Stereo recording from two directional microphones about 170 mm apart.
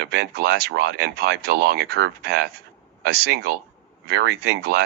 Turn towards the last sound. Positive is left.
turn(degrees=-70)  # may be behind; listen again after turning